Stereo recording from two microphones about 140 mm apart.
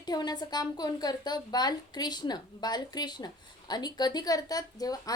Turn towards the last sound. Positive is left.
turn(degrees=25)  # may be behind; listen again after turning